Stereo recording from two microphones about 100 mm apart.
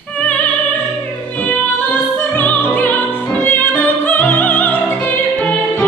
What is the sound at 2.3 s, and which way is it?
Music, 15° left (ahead or behind).